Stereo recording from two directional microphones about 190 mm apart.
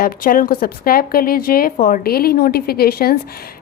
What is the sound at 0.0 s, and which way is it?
A woman's voice, 45° left (ahead or behind).